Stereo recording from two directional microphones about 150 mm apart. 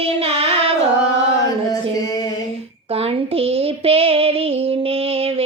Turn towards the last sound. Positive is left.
turn(degrees=-40)  # may be behind; listen again after turning